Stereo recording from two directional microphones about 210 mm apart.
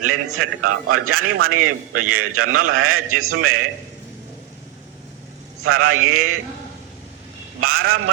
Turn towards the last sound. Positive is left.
turn(degrees=-85)